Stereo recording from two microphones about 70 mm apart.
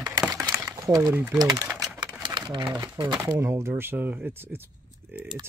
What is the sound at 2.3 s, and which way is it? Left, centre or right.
Crumpling, right.